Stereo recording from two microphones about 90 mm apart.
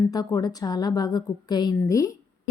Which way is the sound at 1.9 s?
35° left (ahead or behind).